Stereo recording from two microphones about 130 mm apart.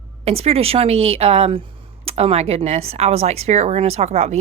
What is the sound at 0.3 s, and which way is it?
A woman's voice, 50° right (ahead or behind).